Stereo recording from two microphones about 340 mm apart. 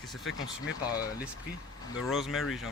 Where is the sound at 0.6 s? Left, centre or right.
Left.